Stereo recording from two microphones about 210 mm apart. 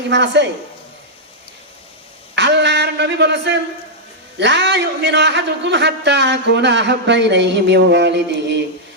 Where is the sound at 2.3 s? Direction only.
55° right (ahead or behind).